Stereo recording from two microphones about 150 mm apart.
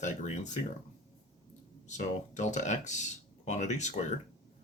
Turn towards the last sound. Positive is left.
turn(degrees=50)  # may be behind; listen again after turning